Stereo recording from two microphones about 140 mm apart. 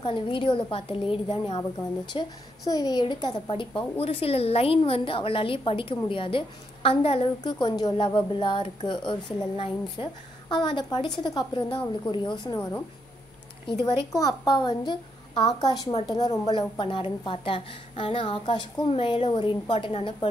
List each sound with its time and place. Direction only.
0.0 s a woman's voice: 35° left (ahead or behind)
2.1 s a woman's voice: 25° left (ahead or behind)
14.1 s a woman's voice: 25° left (ahead or behind)